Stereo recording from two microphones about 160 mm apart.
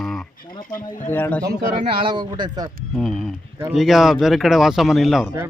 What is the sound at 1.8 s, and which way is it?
Speech, 35° right (ahead or behind).